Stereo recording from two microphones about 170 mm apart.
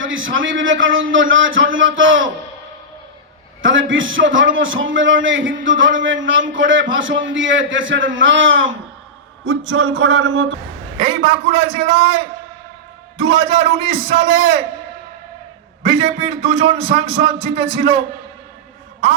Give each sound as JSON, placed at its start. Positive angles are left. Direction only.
{"t": 0.3, "sound": "a man's voice", "side_deg": -90}
{"t": 3.6, "sound": "a man's voice", "side_deg": -90}
{"t": 10.9, "sound": "a man's voice", "side_deg": -35}
{"t": 15.8, "sound": "a man's voice", "side_deg": -35}